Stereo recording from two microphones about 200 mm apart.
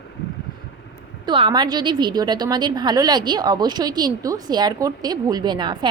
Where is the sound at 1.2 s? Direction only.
25° right (ahead or behind).